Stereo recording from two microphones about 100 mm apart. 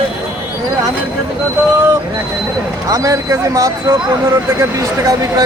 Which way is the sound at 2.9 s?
35° right (ahead or behind).